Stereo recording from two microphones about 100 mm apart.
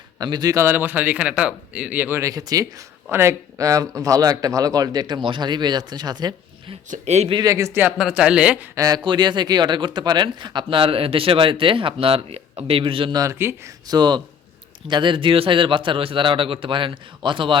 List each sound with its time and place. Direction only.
0.2 s speech: 40° right (ahead or behind)
0.5 s speech: 25° right (ahead or behind)
3.1 s speech: 25° right (ahead or behind); by 6.3 s 45° right (ahead or behind)
6.7 s speech: 90° right
7.3 s speech: 35° right (ahead or behind)
7.9 s speech: 5° right (ahead or behind)
8.7 s speech: 35° right (ahead or behind)
9.0 s speech: 45° right (ahead or behind)
13.4 s speech: 25° right (ahead or behind)
13.8 s speech: 45° right (ahead or behind)